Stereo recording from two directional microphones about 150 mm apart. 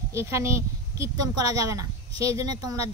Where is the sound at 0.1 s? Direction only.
20° right (ahead or behind).